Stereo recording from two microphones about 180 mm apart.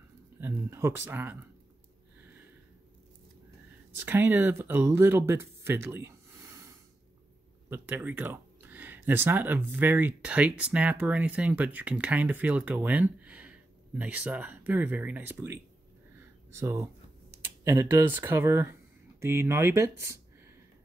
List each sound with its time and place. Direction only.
0.4 s speech: 15° right (ahead or behind)
3.9 s speech: 10° right (ahead or behind)
7.7 s speech: 10° right (ahead or behind)
16.2 s a sound: 15° right (ahead or behind)
17.6 s speech: 15° right (ahead or behind)